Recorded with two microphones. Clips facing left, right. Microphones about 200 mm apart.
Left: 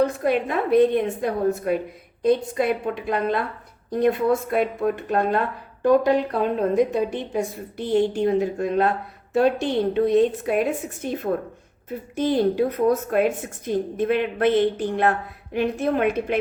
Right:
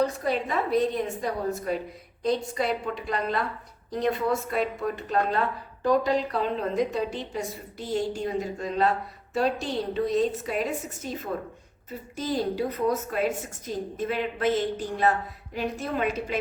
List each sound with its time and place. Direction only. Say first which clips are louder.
0.0 s a woman's voice: left 5 dB; 55° left (ahead or behind)